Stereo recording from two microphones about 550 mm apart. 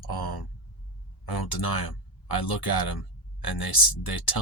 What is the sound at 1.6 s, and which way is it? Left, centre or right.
Speech, left.